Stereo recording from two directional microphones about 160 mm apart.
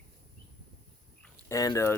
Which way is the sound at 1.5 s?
20° left (ahead or behind).